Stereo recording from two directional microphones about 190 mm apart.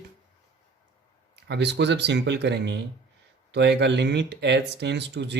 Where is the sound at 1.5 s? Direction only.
65° right (ahead or behind).